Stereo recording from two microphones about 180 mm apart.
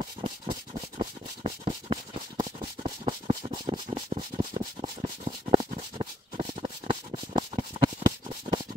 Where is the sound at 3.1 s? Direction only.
25° right (ahead or behind).